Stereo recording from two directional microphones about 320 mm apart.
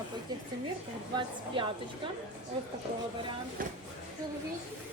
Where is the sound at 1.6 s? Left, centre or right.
Centre.